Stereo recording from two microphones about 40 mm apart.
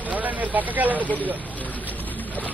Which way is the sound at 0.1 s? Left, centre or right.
Right.